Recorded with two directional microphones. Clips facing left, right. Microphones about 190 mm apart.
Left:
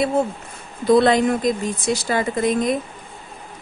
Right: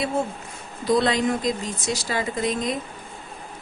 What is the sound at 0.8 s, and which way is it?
A woman's voice, 55° left (ahead or behind).